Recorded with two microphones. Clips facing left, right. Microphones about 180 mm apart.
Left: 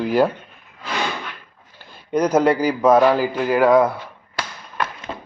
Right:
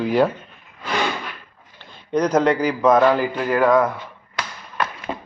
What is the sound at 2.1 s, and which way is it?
A man's voice, 10° left (ahead or behind).